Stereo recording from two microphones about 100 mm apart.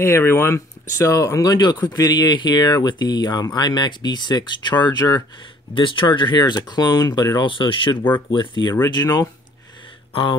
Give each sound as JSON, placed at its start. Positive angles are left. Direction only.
{"t": 0.0, "sound": "speech", "side_deg": 25}
{"t": 5.8, "sound": "speech", "side_deg": 55}
{"t": 7.4, "sound": "speech", "side_deg": 55}
{"t": 8.9, "sound": "speech", "side_deg": 40}